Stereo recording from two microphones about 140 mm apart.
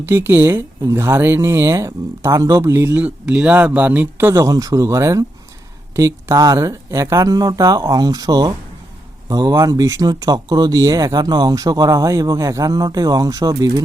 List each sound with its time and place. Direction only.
0.0 s speech: 20° right (ahead or behind)